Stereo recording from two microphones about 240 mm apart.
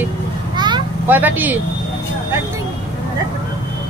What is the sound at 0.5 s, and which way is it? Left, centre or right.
Vehicle, centre.